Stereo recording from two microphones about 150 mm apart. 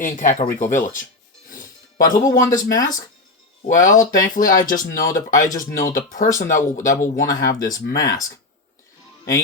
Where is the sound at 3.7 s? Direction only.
60° left (ahead or behind).